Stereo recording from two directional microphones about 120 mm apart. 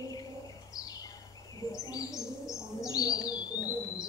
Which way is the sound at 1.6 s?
30° left (ahead or behind).